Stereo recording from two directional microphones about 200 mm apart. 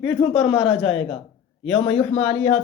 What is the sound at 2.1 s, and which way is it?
Speech, 10° left (ahead or behind).